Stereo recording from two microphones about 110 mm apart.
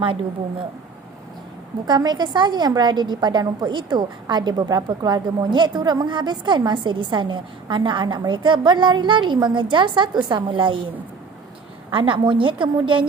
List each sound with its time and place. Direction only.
1.9 s a woman's voice: 40° right (ahead or behind)
11.9 s a woman's voice: 50° right (ahead or behind)